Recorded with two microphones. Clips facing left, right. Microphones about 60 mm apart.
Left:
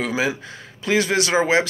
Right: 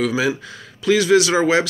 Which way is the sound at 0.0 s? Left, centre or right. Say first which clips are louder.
Right 3 dB; left.